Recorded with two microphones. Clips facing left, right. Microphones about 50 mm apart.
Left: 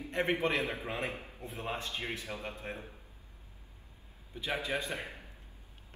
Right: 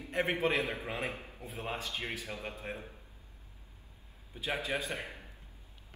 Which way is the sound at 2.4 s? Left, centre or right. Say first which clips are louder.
Even; centre.